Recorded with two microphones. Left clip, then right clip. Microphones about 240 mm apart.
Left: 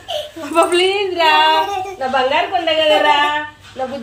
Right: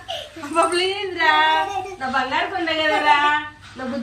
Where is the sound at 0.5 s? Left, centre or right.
Centre.